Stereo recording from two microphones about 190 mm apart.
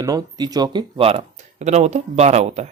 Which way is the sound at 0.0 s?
20° right (ahead or behind).